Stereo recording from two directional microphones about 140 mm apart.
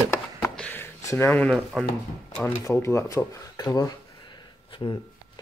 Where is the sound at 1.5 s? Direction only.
Centre (ahead or behind).